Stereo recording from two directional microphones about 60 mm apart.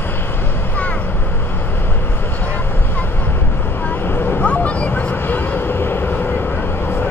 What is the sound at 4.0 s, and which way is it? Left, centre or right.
Vehicle, left.